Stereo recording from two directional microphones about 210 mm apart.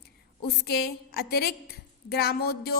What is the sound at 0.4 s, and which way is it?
A woman's voice, 50° left (ahead or behind).